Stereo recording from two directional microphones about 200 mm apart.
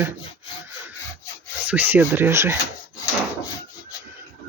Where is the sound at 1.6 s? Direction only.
10° right (ahead or behind).